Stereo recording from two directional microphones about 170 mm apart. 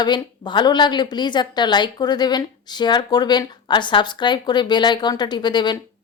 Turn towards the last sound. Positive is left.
turn(degrees=25)  # may be behind; listen again after turning